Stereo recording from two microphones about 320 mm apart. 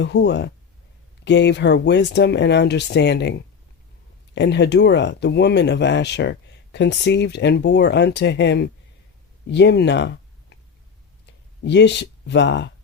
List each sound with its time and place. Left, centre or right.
0.0 s speech: left
11.6 s speech: left